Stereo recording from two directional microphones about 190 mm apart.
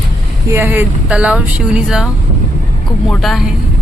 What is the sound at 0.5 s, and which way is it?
Speech, 10° right (ahead or behind).